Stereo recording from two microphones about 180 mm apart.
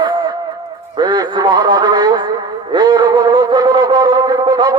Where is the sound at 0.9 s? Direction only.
25° right (ahead or behind).